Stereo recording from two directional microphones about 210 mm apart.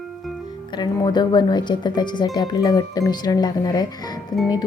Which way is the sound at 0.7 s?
20° left (ahead or behind).